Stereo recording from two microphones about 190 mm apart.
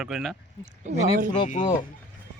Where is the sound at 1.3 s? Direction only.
40° left (ahead or behind).